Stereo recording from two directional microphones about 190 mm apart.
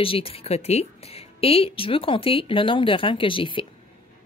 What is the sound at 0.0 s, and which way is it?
Speech, 30° left (ahead or behind).